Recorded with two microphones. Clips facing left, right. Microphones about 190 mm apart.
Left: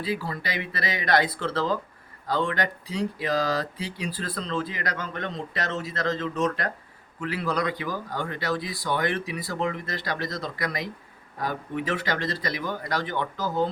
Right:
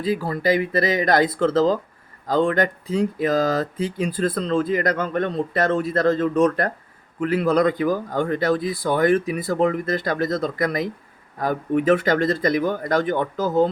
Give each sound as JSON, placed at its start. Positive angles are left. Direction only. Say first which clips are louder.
{"t": 0.0, "sound": "speech", "louder": "right 8 dB", "side_deg": -45}